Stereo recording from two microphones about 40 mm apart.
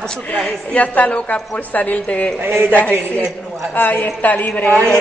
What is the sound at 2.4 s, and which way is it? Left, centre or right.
Speech, right.